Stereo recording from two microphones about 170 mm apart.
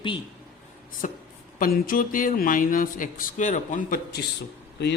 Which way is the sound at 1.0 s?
50° left (ahead or behind).